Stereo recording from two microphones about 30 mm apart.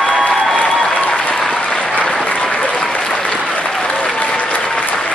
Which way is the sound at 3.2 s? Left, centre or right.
Left.